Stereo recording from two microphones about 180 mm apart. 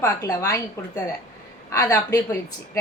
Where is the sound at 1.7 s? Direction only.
20° left (ahead or behind).